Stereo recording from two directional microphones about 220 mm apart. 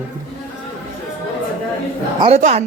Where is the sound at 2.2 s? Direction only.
30° right (ahead or behind).